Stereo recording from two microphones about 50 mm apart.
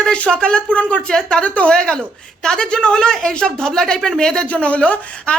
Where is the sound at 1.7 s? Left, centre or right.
Centre.